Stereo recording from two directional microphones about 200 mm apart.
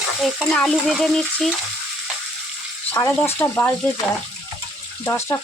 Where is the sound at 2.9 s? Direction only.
15° left (ahead or behind).